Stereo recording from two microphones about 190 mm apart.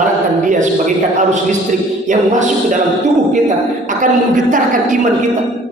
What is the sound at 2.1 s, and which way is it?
Speech, 40° right (ahead or behind).